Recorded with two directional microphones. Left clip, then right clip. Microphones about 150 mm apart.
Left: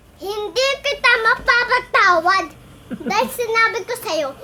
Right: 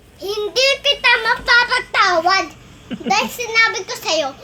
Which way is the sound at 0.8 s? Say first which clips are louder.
Right 1 dB; 30° left (ahead or behind).